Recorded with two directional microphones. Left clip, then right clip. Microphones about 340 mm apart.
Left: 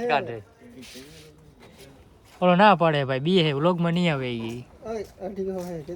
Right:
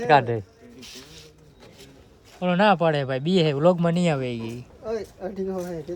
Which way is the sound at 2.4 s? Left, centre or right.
Centre.